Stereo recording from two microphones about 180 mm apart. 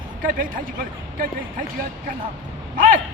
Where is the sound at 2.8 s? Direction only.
50° right (ahead or behind).